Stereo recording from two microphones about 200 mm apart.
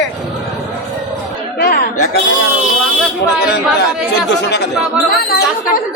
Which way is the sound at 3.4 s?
55° left (ahead or behind).